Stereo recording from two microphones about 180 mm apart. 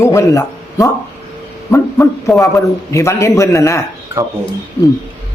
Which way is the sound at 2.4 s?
15° left (ahead or behind).